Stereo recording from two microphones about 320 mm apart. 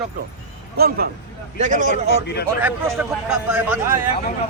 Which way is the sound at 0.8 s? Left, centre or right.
Right.